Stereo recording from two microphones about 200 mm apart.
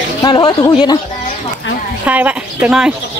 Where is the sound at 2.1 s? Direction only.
5° right (ahead or behind).